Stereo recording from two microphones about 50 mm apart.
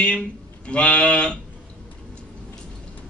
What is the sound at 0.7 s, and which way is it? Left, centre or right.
Speech, left.